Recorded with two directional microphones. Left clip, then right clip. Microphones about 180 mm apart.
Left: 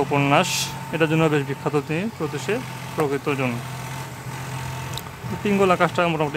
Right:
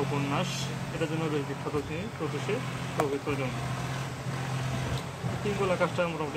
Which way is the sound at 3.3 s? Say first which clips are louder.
Left 8 dB; 60° left (ahead or behind).